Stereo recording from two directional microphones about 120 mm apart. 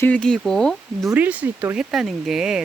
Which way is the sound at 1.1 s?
15° right (ahead or behind).